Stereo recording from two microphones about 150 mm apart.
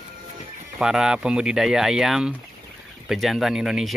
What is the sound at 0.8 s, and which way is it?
Speech, 5° right (ahead or behind).